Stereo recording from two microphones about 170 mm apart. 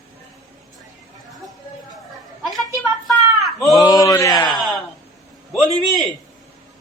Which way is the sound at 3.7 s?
20° left (ahead or behind).